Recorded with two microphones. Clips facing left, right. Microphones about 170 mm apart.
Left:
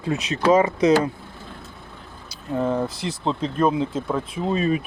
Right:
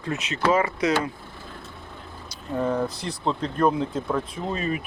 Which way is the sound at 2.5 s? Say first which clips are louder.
Left 2 dB; 5° left (ahead or behind).